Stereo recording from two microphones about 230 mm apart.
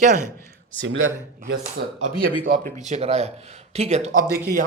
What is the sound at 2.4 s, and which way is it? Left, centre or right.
A man's voice, right.